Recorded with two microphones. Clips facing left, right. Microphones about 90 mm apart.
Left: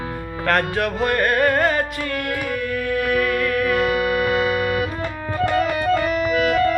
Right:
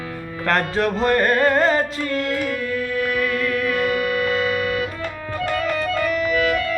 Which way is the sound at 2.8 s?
80° left.